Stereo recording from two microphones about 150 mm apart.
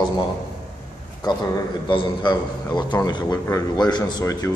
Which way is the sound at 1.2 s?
30° left (ahead or behind).